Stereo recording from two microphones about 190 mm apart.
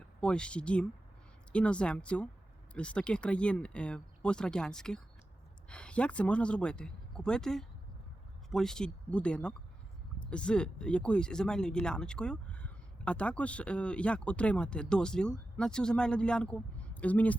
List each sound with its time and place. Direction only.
0.2 s speech: 5° left (ahead or behind)